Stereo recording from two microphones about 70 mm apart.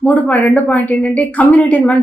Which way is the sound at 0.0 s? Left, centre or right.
Left.